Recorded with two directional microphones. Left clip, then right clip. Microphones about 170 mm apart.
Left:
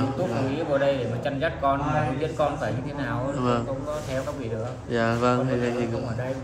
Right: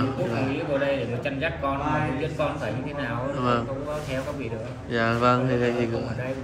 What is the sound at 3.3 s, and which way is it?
Speech, 10° left (ahead or behind).